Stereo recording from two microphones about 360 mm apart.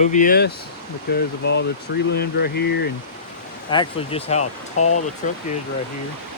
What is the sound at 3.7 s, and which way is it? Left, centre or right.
Speech, centre.